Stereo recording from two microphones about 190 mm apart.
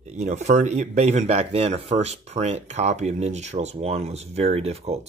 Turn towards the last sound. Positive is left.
turn(degrees=-35)  # may be behind; listen again after turning